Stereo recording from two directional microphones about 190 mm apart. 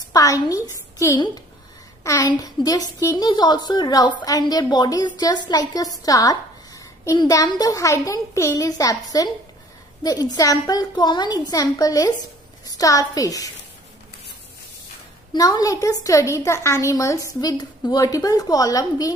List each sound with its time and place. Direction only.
0.1 s a woman's voice: 15° left (ahead or behind)
15.3 s a woman's voice: 20° left (ahead or behind)